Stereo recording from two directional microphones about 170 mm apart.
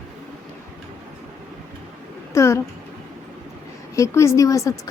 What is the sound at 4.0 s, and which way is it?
Speech, 15° left (ahead or behind).